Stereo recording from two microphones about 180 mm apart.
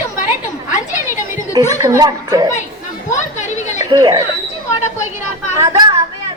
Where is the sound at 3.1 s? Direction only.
40° left (ahead or behind).